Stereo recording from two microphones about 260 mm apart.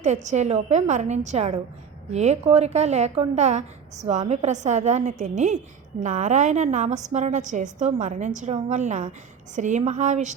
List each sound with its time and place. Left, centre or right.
0.0 s a woman's voice: right